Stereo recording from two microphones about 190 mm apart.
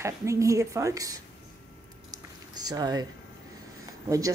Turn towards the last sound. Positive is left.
turn(degrees=-20)  # may be behind; listen again after turning